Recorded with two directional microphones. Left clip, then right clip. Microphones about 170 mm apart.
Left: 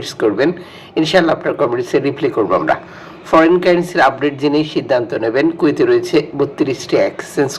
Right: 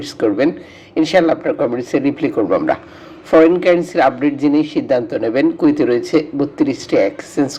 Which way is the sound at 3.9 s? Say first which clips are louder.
Left 1 dB; 40° right (ahead or behind).